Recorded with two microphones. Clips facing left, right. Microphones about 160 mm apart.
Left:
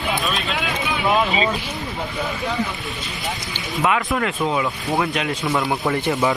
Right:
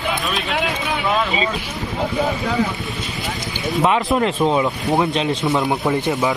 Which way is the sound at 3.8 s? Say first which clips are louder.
Right 3 dB; 30° right (ahead or behind).